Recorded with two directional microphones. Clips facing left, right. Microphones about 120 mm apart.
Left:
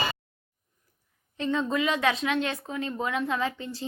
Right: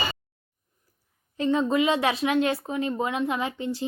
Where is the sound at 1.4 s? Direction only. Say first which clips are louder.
Right 4 dB; 25° right (ahead or behind).